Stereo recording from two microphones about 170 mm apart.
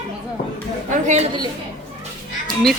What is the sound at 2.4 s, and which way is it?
Honk, centre (ahead or behind).